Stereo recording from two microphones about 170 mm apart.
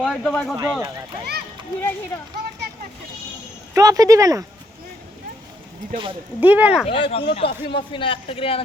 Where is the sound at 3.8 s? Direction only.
20° right (ahead or behind).